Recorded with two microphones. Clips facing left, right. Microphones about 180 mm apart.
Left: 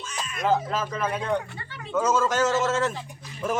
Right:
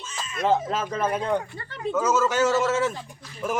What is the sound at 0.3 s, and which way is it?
Speech, 25° right (ahead or behind).